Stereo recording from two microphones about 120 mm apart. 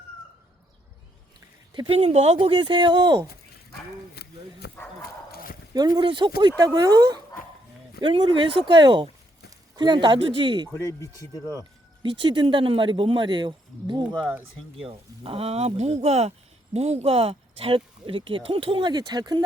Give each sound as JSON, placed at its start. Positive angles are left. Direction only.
{"t": 1.7, "sound": "speech", "side_deg": -50}
{"t": 5.7, "sound": "speech", "side_deg": -35}
{"t": 8.0, "sound": "speech", "side_deg": -45}
{"t": 12.0, "sound": "speech", "side_deg": -45}
{"t": 14.3, "sound": "speech", "side_deg": -10}
{"t": 14.8, "sound": "speech", "side_deg": -55}